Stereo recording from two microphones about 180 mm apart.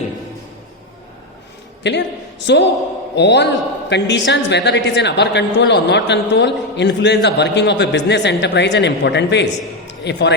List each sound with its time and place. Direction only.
1.8 s a man's voice: 75° left (ahead or behind)